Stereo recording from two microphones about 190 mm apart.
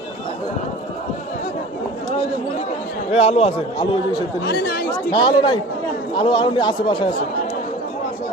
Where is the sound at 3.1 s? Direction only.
30° left (ahead or behind).